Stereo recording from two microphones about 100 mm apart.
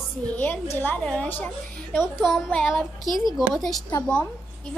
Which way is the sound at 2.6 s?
Centre (ahead or behind).